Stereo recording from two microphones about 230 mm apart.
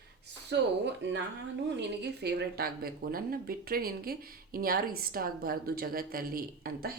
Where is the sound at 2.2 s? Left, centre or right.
Right.